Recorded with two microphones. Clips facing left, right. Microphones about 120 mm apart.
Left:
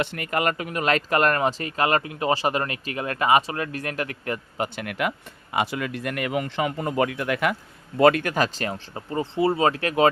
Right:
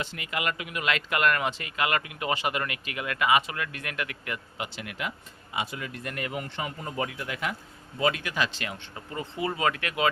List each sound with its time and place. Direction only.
0.0 s speech: 55° left (ahead or behind)
4.9 s speech: 60° left (ahead or behind)
5.5 s a man's voice: 70° left (ahead or behind); by 10.1 s 35° left (ahead or behind)